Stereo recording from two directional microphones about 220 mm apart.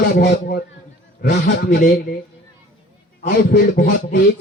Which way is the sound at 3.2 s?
45° left (ahead or behind).